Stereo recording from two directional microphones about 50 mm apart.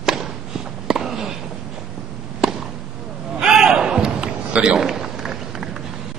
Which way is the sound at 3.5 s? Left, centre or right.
Centre.